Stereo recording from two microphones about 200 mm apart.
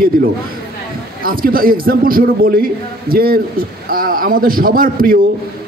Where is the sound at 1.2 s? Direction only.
45° right (ahead or behind).